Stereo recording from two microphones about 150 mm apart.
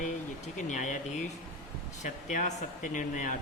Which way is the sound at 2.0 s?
55° left (ahead or behind).